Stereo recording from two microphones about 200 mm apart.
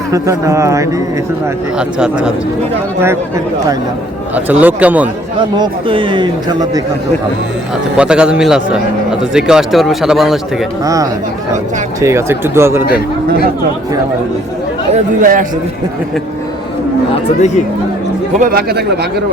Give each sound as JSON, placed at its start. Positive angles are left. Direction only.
{"t": 0.1, "sound": "speech", "side_deg": -15}
{"t": 1.8, "sound": "speech", "side_deg": -5}
{"t": 5.5, "sound": "speech", "side_deg": -25}
{"t": 7.9, "sound": "speech", "side_deg": -5}
{"t": 10.8, "sound": "speech", "side_deg": -15}
{"t": 14.9, "sound": "speech", "side_deg": -40}
{"t": 18.3, "sound": "speech", "side_deg": -45}